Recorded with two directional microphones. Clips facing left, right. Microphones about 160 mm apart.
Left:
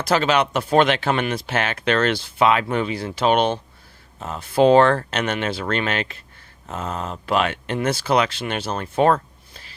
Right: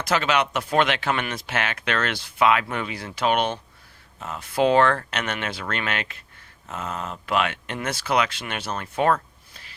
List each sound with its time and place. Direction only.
0.0 s speech: 35° left (ahead or behind)